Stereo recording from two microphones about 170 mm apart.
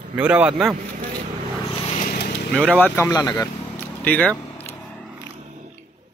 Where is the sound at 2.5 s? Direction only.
10° left (ahead or behind).